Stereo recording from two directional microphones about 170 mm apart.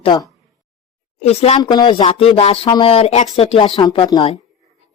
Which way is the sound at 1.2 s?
40° left (ahead or behind).